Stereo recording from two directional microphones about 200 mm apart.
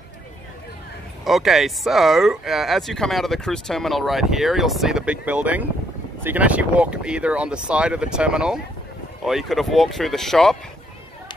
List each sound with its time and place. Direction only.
1.2 s speech: centre (ahead or behind)